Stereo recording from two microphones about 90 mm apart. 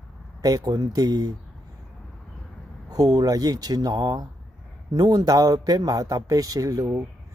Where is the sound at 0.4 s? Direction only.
45° right (ahead or behind).